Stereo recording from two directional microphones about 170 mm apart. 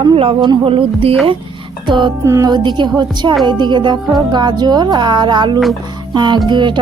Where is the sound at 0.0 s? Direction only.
30° right (ahead or behind).